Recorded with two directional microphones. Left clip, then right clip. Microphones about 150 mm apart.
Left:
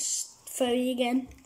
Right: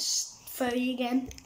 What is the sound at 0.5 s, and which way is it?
Speech, 20° left (ahead or behind).